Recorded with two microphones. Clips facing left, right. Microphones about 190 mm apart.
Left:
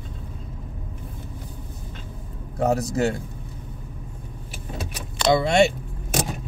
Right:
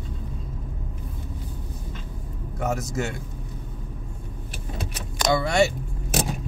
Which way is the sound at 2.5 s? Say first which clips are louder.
Left 5 dB; 35° left (ahead or behind).